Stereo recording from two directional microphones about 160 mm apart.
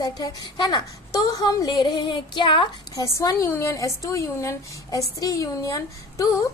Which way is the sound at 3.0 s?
15° left (ahead or behind).